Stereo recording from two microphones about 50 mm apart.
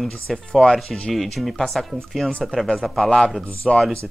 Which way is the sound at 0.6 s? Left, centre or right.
Centre.